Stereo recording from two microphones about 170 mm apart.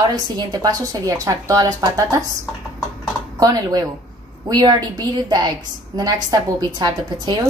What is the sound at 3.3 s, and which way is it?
A woman's voice, 20° right (ahead or behind).